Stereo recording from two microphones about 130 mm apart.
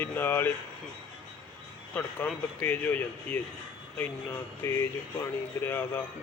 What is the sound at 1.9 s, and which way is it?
Speech, 10° left (ahead or behind).